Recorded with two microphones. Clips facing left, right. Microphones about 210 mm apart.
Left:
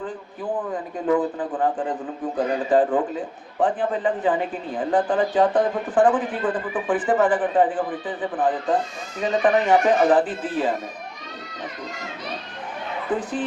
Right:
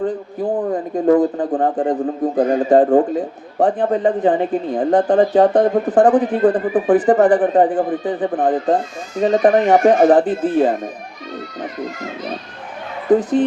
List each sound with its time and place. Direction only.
0.0 s speech: 40° right (ahead or behind)
13.1 s speech: 40° right (ahead or behind)